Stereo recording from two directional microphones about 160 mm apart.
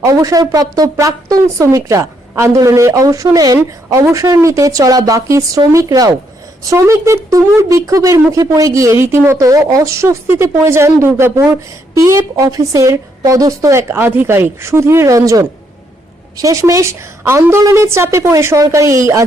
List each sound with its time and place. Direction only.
0.0 s a woman's voice: 20° right (ahead or behind)